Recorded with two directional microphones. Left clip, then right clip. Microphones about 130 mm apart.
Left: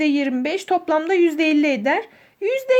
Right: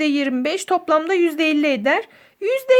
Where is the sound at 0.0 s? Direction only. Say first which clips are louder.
Even; 25° right (ahead or behind).